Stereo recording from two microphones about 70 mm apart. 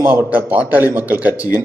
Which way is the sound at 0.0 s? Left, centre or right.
Right.